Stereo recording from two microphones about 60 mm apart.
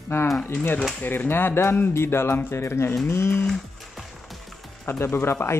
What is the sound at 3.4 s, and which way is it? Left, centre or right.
Music, centre.